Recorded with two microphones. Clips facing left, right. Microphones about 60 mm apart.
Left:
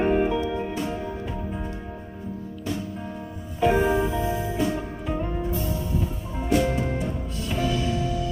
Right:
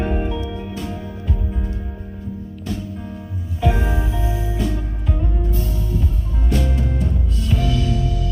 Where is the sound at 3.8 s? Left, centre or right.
Left.